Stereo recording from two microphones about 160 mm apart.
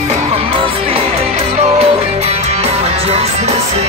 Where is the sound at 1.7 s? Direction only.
40° right (ahead or behind).